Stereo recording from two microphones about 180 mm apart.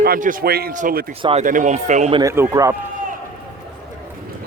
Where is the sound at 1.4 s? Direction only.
45° right (ahead or behind).